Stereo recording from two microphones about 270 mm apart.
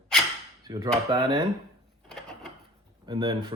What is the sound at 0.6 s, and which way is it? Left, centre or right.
Speech, centre.